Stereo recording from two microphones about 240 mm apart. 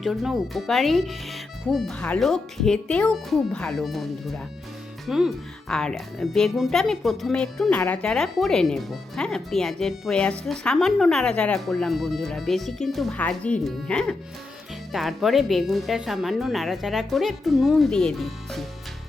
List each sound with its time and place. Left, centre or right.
0.0 s speech: centre